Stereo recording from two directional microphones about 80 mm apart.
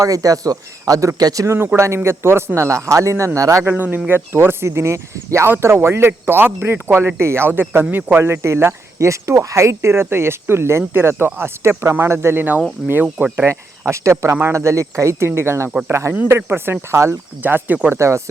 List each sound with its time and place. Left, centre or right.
0.0 s speech: right
1.5 s speech: right
3.6 s speech: right
4.1 s speech: right
13.5 s speech: right
16.1 s speech: right
17.4 s speech: right
17.8 s speech: right